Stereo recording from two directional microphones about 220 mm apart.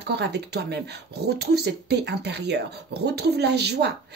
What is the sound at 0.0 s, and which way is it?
Speech, 50° right (ahead or behind).